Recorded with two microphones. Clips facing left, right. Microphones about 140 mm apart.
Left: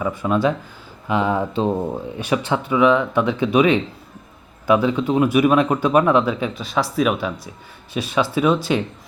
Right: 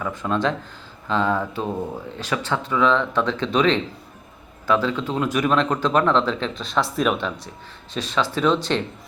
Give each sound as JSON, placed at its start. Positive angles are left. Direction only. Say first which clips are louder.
{"t": 0.2, "sound": "speech", "louder": "left 3 dB", "side_deg": 10}